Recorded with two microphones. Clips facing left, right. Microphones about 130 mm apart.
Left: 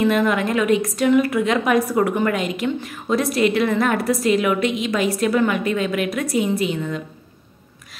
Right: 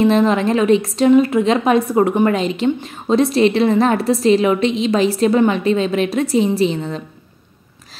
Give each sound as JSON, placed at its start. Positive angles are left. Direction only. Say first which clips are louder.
{"t": 0.0, "sound": "a woman's voice", "louder": "right 4 dB", "side_deg": -30}